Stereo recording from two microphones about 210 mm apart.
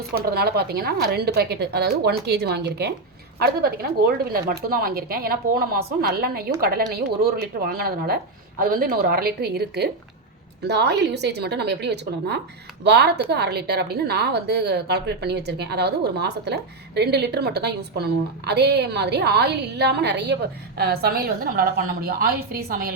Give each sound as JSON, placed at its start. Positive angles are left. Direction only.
{"t": 0.1, "sound": "a woman's voice", "side_deg": -45}